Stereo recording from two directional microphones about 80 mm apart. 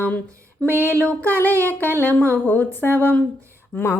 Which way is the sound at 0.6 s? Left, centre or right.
Centre.